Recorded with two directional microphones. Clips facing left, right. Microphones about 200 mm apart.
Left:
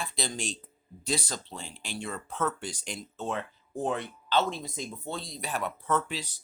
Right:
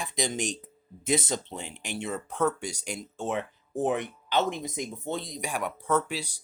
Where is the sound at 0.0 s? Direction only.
15° right (ahead or behind).